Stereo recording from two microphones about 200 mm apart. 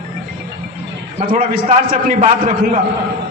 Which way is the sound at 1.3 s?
45° right (ahead or behind).